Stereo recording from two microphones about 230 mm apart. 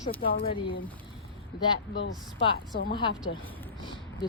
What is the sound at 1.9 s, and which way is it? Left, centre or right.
Speech, left.